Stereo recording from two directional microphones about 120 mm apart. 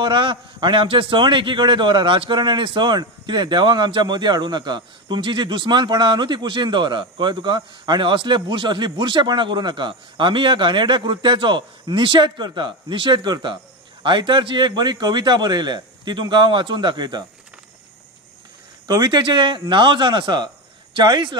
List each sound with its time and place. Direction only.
0.0 s a man's voice: 40° right (ahead or behind)
18.9 s a man's voice: 35° right (ahead or behind)